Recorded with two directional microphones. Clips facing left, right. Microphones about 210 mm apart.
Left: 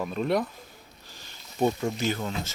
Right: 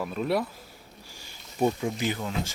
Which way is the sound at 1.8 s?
15° right (ahead or behind).